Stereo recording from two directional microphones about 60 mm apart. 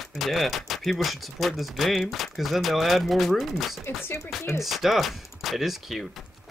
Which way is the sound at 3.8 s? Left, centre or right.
Left.